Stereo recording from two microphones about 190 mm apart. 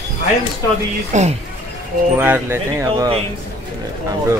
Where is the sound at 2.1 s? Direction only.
10° right (ahead or behind).